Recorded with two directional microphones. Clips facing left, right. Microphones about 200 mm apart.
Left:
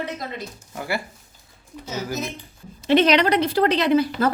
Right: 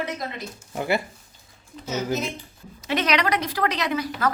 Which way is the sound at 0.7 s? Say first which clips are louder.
Right 4 dB; 20° right (ahead or behind).